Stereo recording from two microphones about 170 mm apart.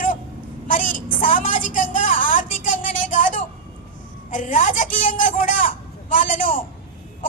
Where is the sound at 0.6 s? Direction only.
50° left (ahead or behind).